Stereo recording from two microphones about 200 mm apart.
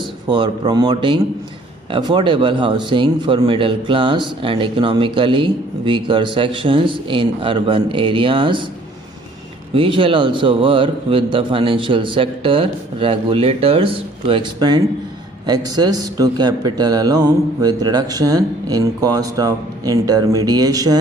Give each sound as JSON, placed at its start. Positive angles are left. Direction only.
{"t": 0.3, "sound": "speech", "side_deg": -25}
{"t": 9.7, "sound": "speech", "side_deg": -25}